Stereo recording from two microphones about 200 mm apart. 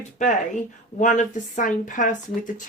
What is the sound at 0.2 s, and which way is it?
A woman's voice, 35° left (ahead or behind).